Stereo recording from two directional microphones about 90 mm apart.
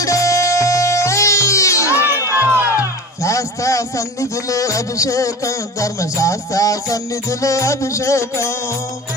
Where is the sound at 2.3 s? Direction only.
25° right (ahead or behind).